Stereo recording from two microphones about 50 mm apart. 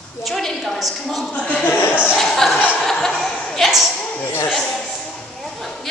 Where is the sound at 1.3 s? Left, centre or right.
Left.